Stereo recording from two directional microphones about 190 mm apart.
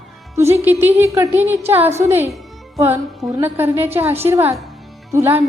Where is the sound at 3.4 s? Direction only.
10° right (ahead or behind).